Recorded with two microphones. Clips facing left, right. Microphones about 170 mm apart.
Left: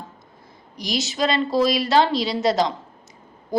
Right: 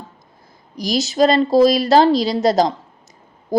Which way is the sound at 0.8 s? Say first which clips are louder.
Right 8 dB; 40° right (ahead or behind).